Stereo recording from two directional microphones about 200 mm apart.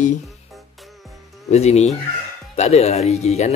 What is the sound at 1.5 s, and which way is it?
Speech, 35° left (ahead or behind).